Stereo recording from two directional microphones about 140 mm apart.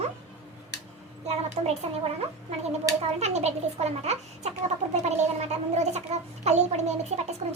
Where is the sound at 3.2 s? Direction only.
50° right (ahead or behind).